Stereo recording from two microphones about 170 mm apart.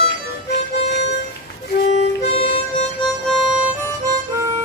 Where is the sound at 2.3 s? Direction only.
35° left (ahead or behind).